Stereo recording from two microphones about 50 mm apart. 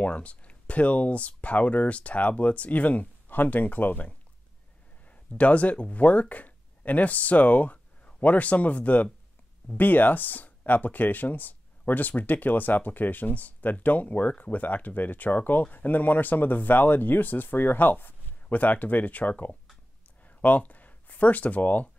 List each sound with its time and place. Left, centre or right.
0.0 s speech: left